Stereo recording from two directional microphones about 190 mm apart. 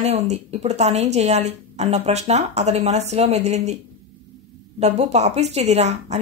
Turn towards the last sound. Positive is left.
turn(degrees=-35)  # may be behind; listen again after turning